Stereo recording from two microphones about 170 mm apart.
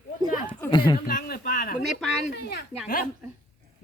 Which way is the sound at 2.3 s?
70° left (ahead or behind).